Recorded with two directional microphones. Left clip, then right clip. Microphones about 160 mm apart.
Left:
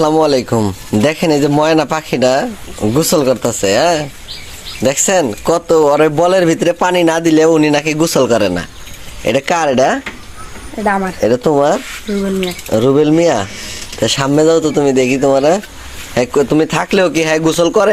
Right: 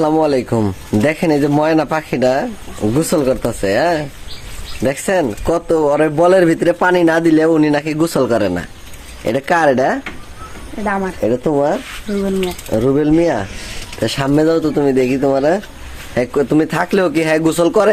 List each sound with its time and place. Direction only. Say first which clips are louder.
0.0 s speech: left 3 dB; 5° left (ahead or behind)
10.8 s speech: left 4 dB; 30° left (ahead or behind)
11.3 s speech: left 4 dB; 15° left (ahead or behind); by 17.9 s 5° right (ahead or behind)